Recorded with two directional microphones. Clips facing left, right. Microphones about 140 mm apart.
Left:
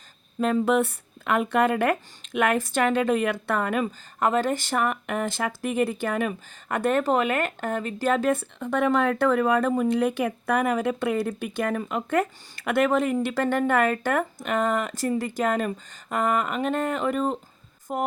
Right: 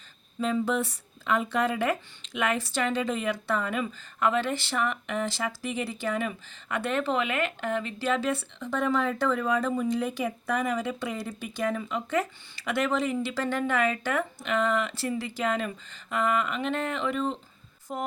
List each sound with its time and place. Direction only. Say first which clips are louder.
0.3 s speech: left 5 dB; 55° left (ahead or behind)